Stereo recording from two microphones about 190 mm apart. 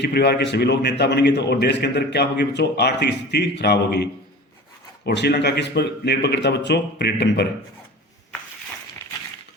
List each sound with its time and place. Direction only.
0.0 s a man's voice: 60° left (ahead or behind)